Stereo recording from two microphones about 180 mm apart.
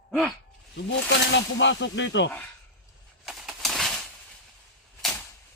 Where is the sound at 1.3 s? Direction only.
90° left.